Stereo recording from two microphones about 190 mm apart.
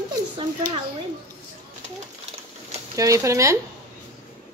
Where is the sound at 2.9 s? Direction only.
15° right (ahead or behind).